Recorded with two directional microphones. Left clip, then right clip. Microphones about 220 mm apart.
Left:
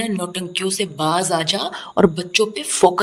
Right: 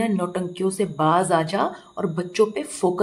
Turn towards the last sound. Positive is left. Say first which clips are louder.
# left 7 dB
turn(degrees=40)  # may be behind; listen again after turning